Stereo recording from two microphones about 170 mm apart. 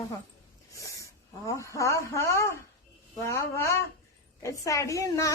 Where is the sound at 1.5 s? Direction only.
20° left (ahead or behind).